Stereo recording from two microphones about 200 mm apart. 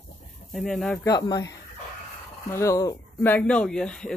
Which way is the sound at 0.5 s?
Centre (ahead or behind).